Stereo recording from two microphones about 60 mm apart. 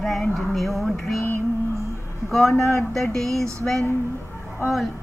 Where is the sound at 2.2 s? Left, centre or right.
Centre.